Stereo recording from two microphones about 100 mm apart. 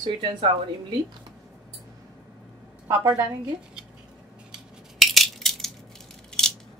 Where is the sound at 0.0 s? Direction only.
55° right (ahead or behind).